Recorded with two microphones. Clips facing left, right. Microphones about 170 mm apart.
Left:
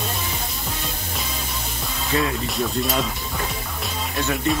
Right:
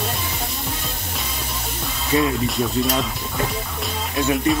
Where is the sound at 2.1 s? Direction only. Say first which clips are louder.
Right 4 dB; 20° right (ahead or behind).